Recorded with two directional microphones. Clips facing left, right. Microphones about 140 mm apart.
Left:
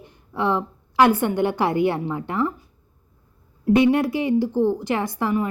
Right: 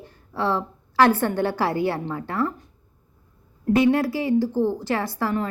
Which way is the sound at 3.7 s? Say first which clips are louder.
Left 2 dB; 20° left (ahead or behind).